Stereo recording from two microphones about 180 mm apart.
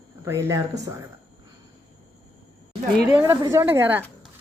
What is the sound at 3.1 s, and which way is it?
Speech, 15° right (ahead or behind).